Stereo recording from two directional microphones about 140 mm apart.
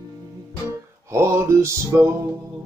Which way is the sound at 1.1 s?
20° right (ahead or behind).